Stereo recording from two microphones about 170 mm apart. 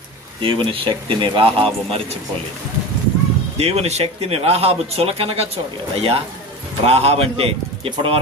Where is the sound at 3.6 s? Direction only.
35° right (ahead or behind).